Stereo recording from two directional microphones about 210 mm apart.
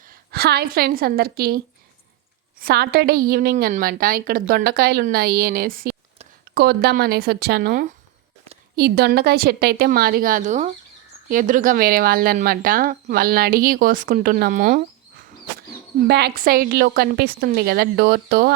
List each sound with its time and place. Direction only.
0.1 s a woman's voice: 50° right (ahead or behind)
16.0 s speech: 50° right (ahead or behind)